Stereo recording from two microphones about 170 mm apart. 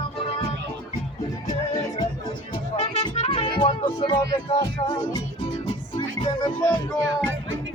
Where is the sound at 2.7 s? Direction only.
40° left (ahead or behind).